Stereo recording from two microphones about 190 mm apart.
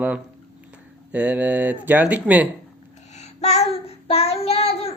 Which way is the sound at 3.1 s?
35° left (ahead or behind).